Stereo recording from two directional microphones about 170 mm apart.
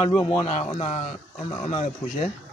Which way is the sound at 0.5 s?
40° left (ahead or behind).